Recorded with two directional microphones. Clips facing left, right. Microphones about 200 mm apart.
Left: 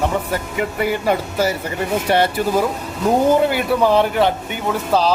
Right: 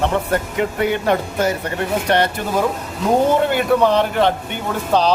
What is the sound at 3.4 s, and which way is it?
A man's voice, 5° left (ahead or behind).